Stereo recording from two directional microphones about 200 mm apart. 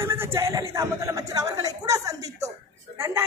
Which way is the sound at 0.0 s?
10° right (ahead or behind).